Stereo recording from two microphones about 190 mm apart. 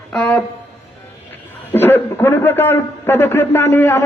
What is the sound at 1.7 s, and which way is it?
A man's voice, 10° left (ahead or behind).